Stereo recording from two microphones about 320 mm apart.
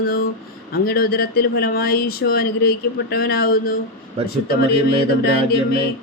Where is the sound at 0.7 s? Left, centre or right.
Left.